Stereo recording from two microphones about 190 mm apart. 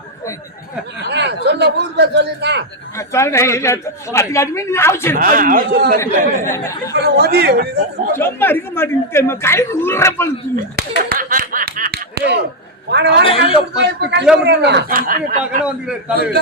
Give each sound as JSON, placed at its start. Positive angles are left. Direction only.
{"t": 1.0, "sound": "a man's voice", "side_deg": -60}
{"t": 3.0, "sound": "speech", "side_deg": 15}
{"t": 5.2, "sound": "speech", "side_deg": -45}
{"t": 6.0, "sound": "speech", "side_deg": 15}
{"t": 6.9, "sound": "a man's voice", "side_deg": -55}
{"t": 8.1, "sound": "speech", "side_deg": 10}
{"t": 10.8, "sound": "snicker", "side_deg": -55}
{"t": 12.9, "sound": "a man's voice", "side_deg": -65}
{"t": 13.2, "sound": "speech", "side_deg": 30}
{"t": 13.7, "sound": "a man's voice", "side_deg": -60}
{"t": 15.6, "sound": "a man's voice", "side_deg": -5}